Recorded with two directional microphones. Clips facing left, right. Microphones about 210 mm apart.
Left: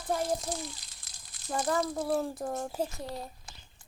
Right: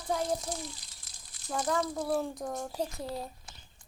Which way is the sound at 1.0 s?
90° left.